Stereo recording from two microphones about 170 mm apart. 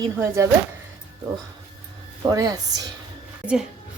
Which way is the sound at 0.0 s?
15° right (ahead or behind).